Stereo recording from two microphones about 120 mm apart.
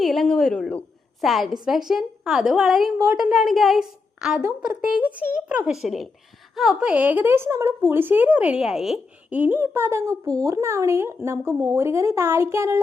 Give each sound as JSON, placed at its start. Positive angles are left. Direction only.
{"t": 0.0, "sound": "a sound", "side_deg": 0}
{"t": 1.2, "sound": "a child's voice", "side_deg": 0}
{"t": 9.4, "sound": "speech", "side_deg": -15}